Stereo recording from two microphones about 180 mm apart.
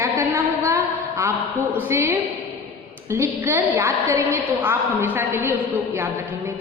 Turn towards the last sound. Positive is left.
turn(degrees=-15)  # may be behind; listen again after turning